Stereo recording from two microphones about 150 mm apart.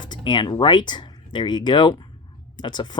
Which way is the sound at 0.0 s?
30° left (ahead or behind).